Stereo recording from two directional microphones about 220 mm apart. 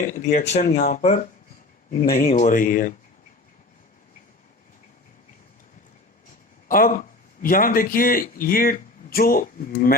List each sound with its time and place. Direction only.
0.1 s a man's voice: 35° left (ahead or behind)
6.7 s a man's voice: 40° left (ahead or behind)